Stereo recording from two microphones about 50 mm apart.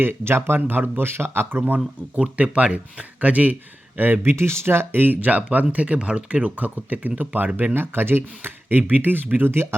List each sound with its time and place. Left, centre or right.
0.0 s speech: right
2.3 s speech: right
6.6 s speech: right